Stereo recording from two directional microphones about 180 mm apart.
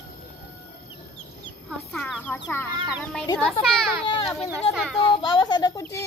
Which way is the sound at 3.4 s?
5° left (ahead or behind).